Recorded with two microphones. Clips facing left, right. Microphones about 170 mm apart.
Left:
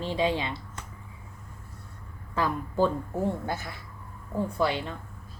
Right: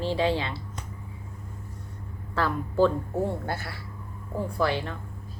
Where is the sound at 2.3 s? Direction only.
15° left (ahead or behind).